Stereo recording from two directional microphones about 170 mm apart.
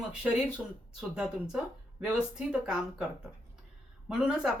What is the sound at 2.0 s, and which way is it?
Speech, 5° right (ahead or behind).